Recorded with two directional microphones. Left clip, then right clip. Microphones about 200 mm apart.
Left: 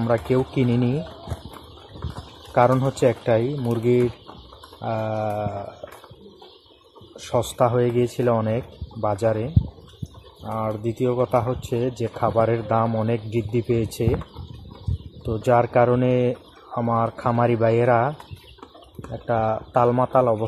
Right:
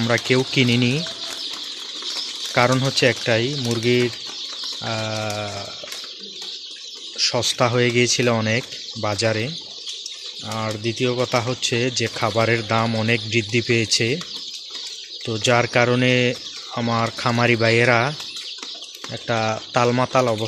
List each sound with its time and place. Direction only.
0.0 s speech: 25° right (ahead or behind)
0.5 s speech: 15° right (ahead or behind)
2.5 s speech: 20° right (ahead or behind)
7.5 s speech: 25° right (ahead or behind)
10.5 s speech: 15° right (ahead or behind)
12.2 s speech: 25° right (ahead or behind)
15.2 s speech: 20° right (ahead or behind)
19.2 s speech: 25° right (ahead or behind)